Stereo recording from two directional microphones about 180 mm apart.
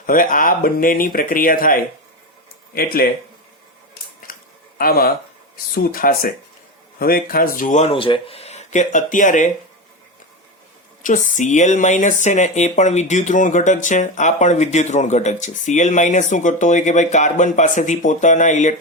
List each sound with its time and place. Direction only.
0.0 s speech: 50° left (ahead or behind)
4.3 s a sound: 50° left (ahead or behind)
4.8 s speech: 55° left (ahead or behind)
11.0 s speech: 45° left (ahead or behind)